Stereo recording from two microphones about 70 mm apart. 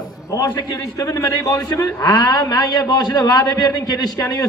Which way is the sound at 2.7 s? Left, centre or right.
Left.